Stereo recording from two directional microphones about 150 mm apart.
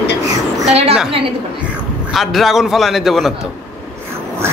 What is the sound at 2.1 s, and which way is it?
Speech, centre (ahead or behind).